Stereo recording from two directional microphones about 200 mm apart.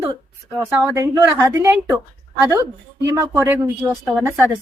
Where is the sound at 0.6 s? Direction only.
10° right (ahead or behind).